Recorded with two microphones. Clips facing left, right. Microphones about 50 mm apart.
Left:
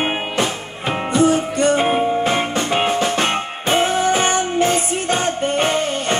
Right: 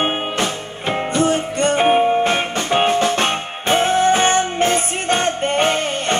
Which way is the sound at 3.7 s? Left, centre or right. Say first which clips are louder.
Right 2 dB; right.